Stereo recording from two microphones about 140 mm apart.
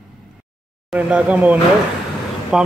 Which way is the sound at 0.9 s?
10° right (ahead or behind).